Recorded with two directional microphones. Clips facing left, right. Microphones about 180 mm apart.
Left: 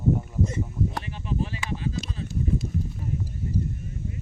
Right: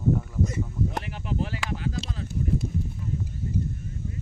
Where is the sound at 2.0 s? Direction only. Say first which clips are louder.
Even; 60° right (ahead or behind).